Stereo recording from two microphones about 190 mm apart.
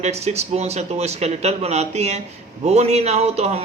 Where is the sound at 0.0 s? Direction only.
35° right (ahead or behind).